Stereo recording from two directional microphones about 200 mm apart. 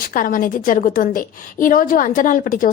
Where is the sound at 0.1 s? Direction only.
45° left (ahead or behind).